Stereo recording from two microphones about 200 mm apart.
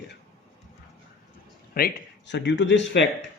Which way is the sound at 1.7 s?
55° left (ahead or behind).